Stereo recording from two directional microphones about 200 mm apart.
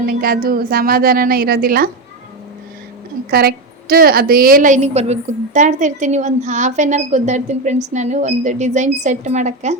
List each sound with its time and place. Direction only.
0.1 s a woman's voice: 45° right (ahead or behind)
3.2 s a woman's voice: 50° right (ahead or behind)